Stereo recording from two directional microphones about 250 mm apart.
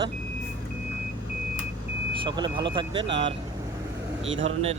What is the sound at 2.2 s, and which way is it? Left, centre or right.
Speech, centre.